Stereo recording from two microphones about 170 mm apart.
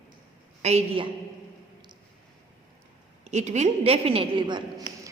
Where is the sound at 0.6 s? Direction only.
40° right (ahead or behind).